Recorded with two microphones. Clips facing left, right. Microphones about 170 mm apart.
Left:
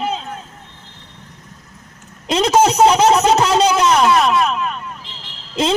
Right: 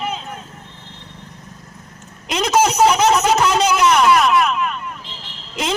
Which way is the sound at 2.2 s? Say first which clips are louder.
Left 3 dB; 30° left (ahead or behind).